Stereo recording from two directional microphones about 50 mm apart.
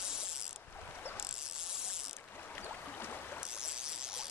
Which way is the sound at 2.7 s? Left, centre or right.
Left.